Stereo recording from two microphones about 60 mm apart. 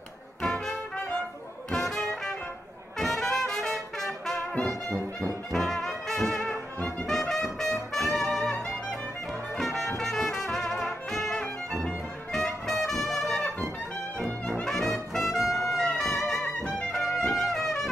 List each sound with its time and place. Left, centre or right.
0.4 s music: centre
3.0 s trumpet: centre
5.5 s brass instrument: centre
6.5 s brass instrument: left
7.1 s music: centre
12.8 s brass instrument: centre
15.7 s music: centre